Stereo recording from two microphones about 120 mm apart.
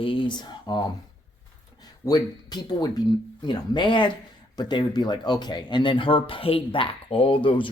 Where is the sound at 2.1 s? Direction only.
35° left (ahead or behind).